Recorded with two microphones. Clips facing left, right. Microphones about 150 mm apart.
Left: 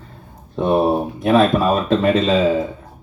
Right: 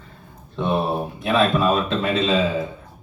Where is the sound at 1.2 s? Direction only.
40° left (ahead or behind).